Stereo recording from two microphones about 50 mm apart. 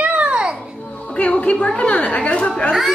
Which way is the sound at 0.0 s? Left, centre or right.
Right.